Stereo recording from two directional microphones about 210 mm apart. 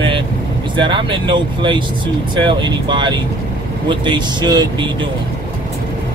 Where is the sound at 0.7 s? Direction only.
25° right (ahead or behind).